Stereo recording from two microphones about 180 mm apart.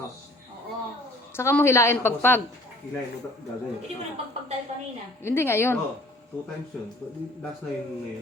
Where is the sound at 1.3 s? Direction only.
15° left (ahead or behind).